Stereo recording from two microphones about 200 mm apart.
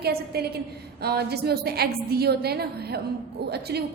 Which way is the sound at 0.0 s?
55° right (ahead or behind).